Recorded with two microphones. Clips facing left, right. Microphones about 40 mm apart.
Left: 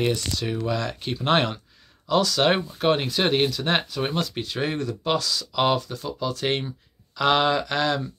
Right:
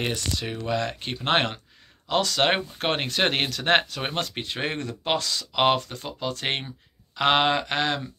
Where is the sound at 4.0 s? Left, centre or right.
Right.